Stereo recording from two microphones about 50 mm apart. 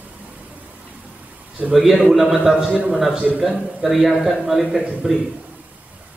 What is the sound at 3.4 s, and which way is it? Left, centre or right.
A man's voice, centre.